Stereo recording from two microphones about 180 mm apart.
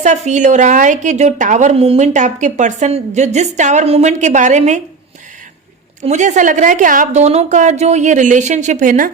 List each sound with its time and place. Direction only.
0.0 s a woman's voice: 40° right (ahead or behind)
6.0 s a woman's voice: 40° right (ahead or behind)